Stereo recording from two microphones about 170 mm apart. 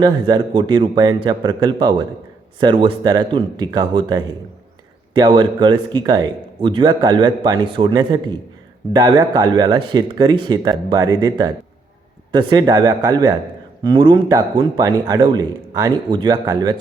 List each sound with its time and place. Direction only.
0.0 s a man's voice: 25° right (ahead or behind)